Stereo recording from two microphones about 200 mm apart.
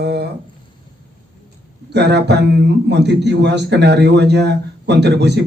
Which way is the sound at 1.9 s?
55° right (ahead or behind).